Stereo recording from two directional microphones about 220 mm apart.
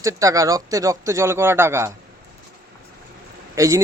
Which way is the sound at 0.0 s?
15° right (ahead or behind).